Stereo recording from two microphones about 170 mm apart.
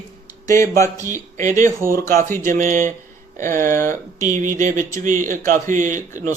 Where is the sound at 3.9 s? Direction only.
50° right (ahead or behind).